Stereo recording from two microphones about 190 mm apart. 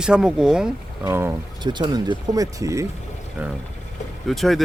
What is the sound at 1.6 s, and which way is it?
Speech, 25° right (ahead or behind).